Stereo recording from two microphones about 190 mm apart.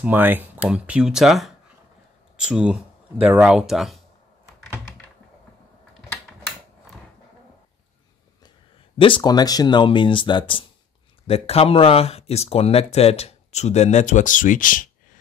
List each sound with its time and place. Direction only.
0.0 s speech: 10° right (ahead or behind)
8.9 s speech: 25° left (ahead or behind); by 14.9 s 45° left (ahead or behind)